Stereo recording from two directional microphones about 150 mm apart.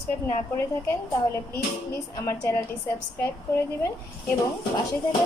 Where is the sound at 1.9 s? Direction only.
20° left (ahead or behind).